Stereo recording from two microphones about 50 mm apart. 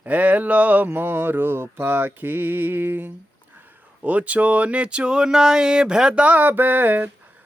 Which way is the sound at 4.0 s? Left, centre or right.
Right.